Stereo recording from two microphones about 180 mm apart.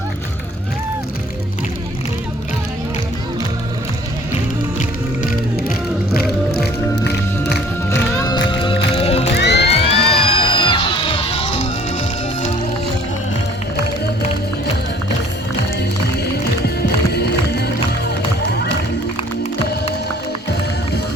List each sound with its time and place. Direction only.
8.2 s music: 25° left (ahead or behind)
9.2 s music: 70° left (ahead or behind)
9.6 s music: 35° left (ahead or behind)
15.8 s music: 65° left (ahead or behind)